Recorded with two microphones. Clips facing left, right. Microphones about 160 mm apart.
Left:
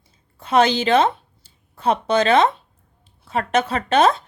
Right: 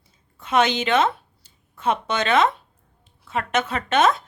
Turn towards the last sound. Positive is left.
turn(degrees=35)  # may be behind; listen again after turning